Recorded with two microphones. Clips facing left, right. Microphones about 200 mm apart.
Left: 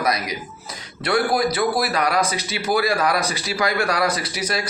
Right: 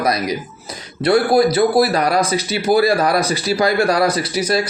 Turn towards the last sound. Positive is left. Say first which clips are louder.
# right 7 dB
turn(degrees=-35)  # may be behind; listen again after turning